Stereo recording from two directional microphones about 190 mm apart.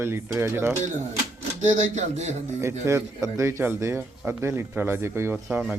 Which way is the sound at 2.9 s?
15° right (ahead or behind).